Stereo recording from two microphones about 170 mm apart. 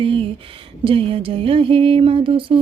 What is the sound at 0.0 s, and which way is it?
Speech, 30° right (ahead or behind).